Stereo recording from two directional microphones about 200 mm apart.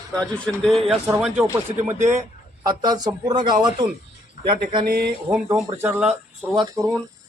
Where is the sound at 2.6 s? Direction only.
20° right (ahead or behind).